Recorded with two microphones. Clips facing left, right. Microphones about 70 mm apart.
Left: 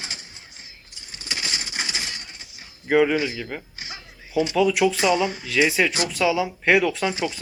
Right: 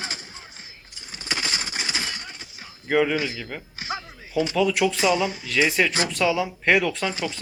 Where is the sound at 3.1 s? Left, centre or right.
Left.